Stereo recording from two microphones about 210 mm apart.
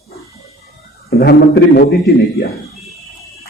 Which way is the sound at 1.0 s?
50° left (ahead or behind).